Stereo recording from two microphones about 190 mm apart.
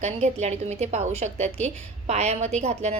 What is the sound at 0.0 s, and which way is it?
A woman's voice, 35° right (ahead or behind).